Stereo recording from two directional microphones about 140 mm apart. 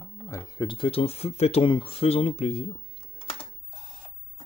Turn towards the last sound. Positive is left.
turn(degrees=50)  # may be behind; listen again after turning